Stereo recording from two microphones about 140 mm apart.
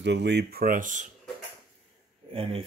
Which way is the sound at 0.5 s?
85° right.